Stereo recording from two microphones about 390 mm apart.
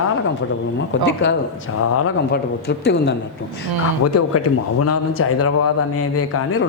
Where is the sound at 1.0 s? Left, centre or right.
Left.